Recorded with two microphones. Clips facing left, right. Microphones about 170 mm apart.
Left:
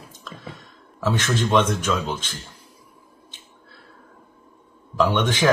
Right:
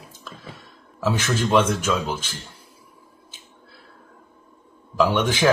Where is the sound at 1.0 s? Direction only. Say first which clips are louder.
Even; 10° right (ahead or behind).